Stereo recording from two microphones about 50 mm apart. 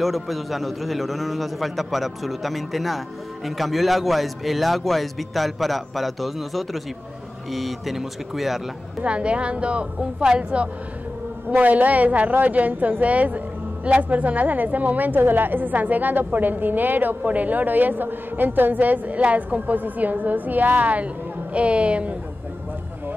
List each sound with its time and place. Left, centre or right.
0.0 s a man's voice: centre
9.0 s a woman's voice: right